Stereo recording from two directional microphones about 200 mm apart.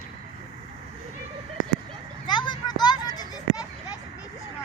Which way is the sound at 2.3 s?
20° left (ahead or behind).